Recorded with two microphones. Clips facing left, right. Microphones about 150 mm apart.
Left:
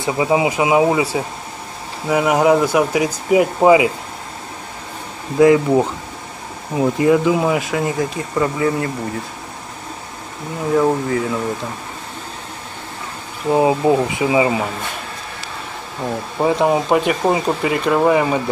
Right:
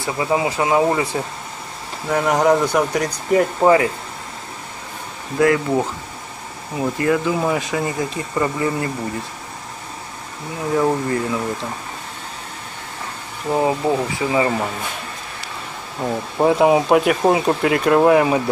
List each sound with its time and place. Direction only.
0.0 s speech: 15° left (ahead or behind)
2.0 s speech: 5° left (ahead or behind)
5.4 s speech: 20° left (ahead or behind)
7.4 s speech: 5° left (ahead or behind)
10.7 s speech: centre (ahead or behind)
13.5 s speech: 15° left (ahead or behind)
16.3 s speech: 5° right (ahead or behind)